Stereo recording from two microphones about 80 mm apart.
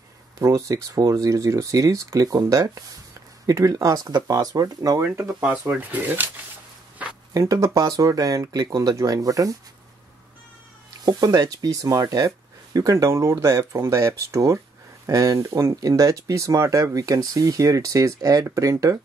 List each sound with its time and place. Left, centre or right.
0.4 s speech: right
5.0 s speech: right
5.4 s speech: centre
7.3 s speech: right
11.1 s speech: right
12.3 s a sound: right
12.9 s speech: right